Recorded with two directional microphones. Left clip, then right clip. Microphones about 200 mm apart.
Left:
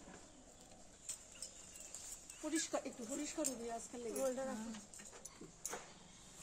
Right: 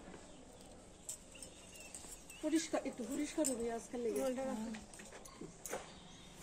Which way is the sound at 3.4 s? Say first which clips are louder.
Right 5 dB; 25° left (ahead or behind).